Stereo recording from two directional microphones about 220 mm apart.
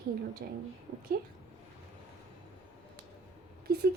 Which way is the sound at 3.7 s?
45° right (ahead or behind).